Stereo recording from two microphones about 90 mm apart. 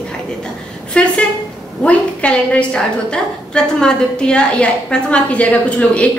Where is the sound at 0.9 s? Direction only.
10° left (ahead or behind).